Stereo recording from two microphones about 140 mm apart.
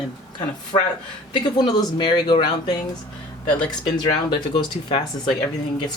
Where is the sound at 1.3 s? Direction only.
35° left (ahead or behind).